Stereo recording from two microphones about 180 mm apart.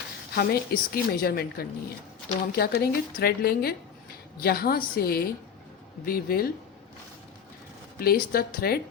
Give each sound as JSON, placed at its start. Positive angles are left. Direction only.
{"t": 0.3, "sound": "a woman's voice", "side_deg": 55}
{"t": 7.9, "sound": "a woman's voice", "side_deg": 55}